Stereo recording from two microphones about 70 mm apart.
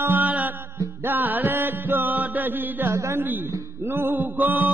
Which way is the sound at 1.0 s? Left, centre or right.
Right.